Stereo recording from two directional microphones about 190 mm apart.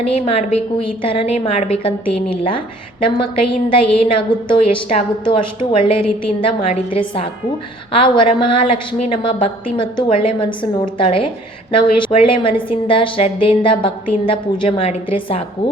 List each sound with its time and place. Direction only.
0.1 s a woman's voice: 30° left (ahead or behind)